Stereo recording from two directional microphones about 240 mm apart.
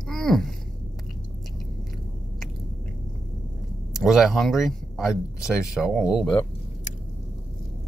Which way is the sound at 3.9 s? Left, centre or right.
Centre.